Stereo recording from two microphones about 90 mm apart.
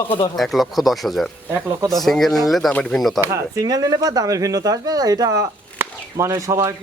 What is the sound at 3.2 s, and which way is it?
Speech, 35° right (ahead or behind).